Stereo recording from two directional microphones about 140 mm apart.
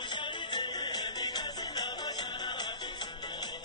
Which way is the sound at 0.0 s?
35° left (ahead or behind).